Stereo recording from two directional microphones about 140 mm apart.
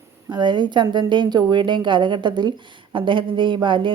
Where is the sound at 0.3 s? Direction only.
35° right (ahead or behind).